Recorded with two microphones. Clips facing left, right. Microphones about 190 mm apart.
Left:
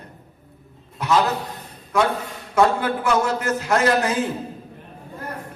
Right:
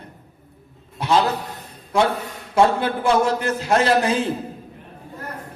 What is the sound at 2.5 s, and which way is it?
A man's voice, 25° right (ahead or behind).